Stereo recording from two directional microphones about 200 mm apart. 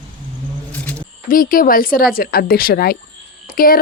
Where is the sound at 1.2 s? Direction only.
45° left (ahead or behind).